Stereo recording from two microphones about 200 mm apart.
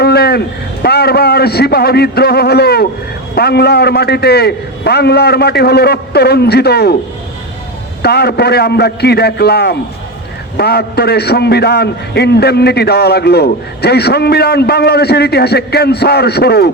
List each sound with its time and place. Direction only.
0.0 s a man's voice: 55° left (ahead or behind)
8.0 s a man's voice: 55° left (ahead or behind)